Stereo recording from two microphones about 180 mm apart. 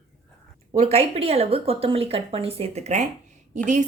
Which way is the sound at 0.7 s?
35° right (ahead or behind).